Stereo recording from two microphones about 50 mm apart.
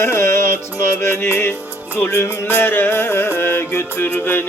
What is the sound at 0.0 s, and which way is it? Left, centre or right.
Music, left.